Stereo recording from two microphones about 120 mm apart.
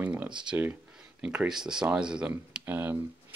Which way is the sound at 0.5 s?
15° right (ahead or behind).